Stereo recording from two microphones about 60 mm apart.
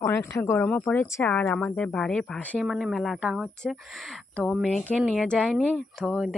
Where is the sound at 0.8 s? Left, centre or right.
Left.